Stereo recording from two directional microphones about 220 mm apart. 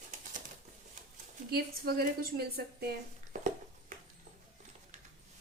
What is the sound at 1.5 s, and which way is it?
Speech, 45° right (ahead or behind).